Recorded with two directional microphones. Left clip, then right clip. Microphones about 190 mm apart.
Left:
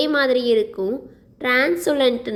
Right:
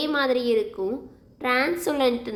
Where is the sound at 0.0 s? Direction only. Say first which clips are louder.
Left 5 dB; 20° left (ahead or behind).